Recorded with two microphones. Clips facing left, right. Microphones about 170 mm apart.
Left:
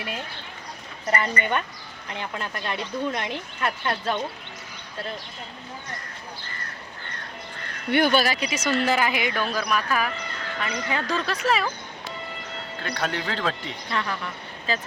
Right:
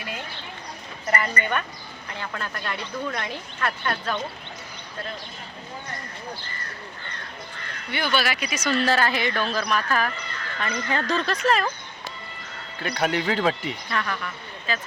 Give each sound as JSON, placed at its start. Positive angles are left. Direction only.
{"t": 1.1, "sound": "speech", "side_deg": 20}
{"t": 7.9, "sound": "speech", "side_deg": 50}
{"t": 13.0, "sound": "speech", "side_deg": -10}
{"t": 13.9, "sound": "speech", "side_deg": 20}
{"t": 14.7, "sound": "speech", "side_deg": 35}